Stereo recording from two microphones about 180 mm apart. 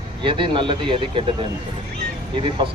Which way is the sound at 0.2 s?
25° right (ahead or behind).